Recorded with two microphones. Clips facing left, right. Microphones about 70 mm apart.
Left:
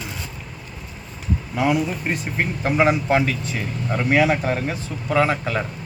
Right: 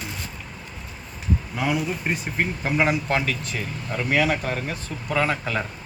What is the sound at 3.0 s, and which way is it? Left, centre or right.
Speech, centre.